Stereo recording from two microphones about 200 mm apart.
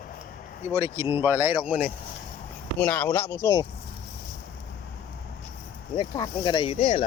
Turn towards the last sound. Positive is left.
turn(degrees=30)  # may be behind; listen again after turning